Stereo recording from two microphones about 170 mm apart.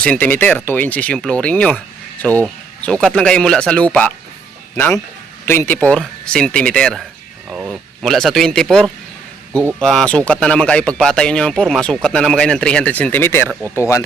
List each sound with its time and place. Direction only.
0.0 s a man's voice: 10° left (ahead or behind)